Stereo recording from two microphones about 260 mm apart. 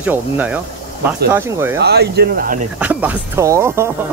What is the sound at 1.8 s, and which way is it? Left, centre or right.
Speech, right.